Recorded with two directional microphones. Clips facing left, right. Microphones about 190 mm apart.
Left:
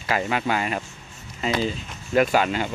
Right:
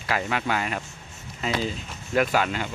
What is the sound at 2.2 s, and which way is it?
Speech, 25° left (ahead or behind).